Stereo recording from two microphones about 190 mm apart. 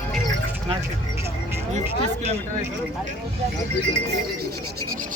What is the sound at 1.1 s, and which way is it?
Vehicle, 15° right (ahead or behind).